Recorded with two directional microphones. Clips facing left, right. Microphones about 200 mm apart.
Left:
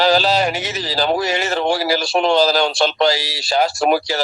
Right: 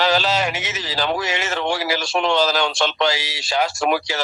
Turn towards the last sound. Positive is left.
turn(degrees=35)  # may be behind; listen again after turning